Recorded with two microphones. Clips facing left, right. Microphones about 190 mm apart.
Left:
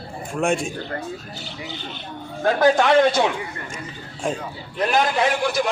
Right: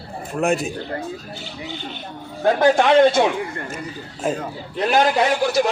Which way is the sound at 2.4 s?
25° right (ahead or behind).